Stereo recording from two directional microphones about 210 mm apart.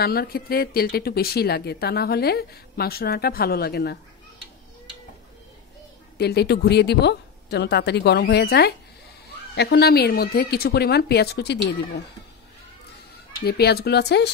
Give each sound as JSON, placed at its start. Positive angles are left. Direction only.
{"t": 0.0, "sound": "speech", "side_deg": 45}
{"t": 6.1, "sound": "speech", "side_deg": 50}
{"t": 13.4, "sound": "speech", "side_deg": 50}